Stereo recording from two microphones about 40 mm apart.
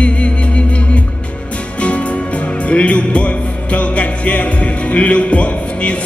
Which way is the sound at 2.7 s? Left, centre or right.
Left.